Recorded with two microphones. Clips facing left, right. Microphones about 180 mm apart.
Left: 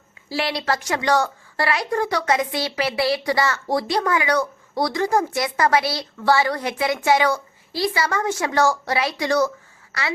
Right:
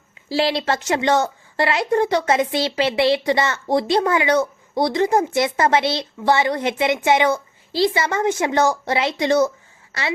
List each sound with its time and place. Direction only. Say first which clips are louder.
0.3 s a woman's voice: right 4 dB; 25° right (ahead or behind)